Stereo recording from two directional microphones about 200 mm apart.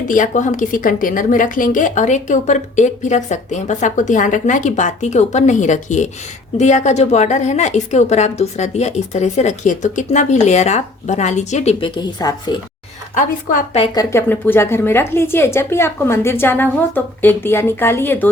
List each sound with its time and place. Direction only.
0.1 s a woman's voice: 40° left (ahead or behind)
12.2 s speech: 20° left (ahead or behind)
13.1 s a woman's voice: 40° left (ahead or behind)
13.8 s a woman's voice: 20° left (ahead or behind)